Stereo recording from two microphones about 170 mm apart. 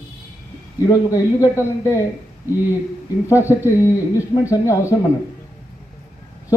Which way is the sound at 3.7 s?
20° left (ahead or behind).